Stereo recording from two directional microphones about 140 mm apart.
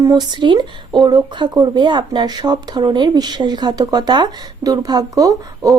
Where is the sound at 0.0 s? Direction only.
30° right (ahead or behind).